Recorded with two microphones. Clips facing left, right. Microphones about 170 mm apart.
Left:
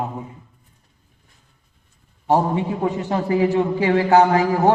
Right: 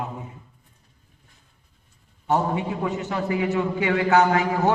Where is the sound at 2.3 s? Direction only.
30° left (ahead or behind).